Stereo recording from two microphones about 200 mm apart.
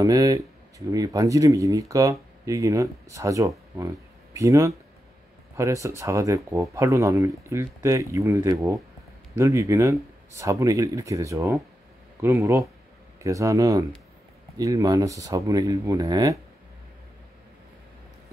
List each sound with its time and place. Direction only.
0.0 s speech: 15° right (ahead or behind)